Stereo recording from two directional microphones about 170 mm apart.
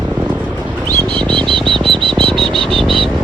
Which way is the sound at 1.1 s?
30° right (ahead or behind).